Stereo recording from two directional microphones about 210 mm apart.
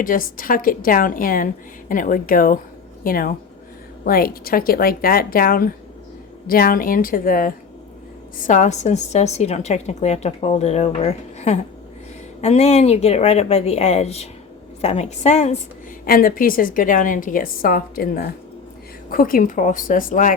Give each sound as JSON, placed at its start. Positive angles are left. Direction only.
{"t": 0.0, "sound": "a woman's voice", "side_deg": 40}
{"t": 16.0, "sound": "a woman's voice", "side_deg": 45}